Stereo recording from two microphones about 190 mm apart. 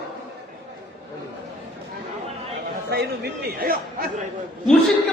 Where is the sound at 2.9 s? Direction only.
60° right (ahead or behind).